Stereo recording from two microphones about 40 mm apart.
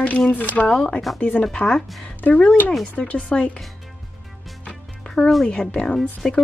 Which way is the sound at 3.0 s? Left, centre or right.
Left.